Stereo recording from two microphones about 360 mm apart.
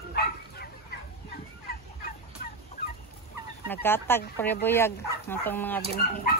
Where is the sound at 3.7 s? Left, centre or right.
Centre.